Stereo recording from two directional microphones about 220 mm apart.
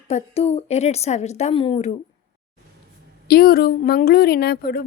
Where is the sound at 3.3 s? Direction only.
45° left (ahead or behind).